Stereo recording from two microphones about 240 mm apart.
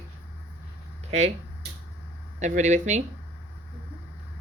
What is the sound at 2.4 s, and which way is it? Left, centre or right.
Speech, right.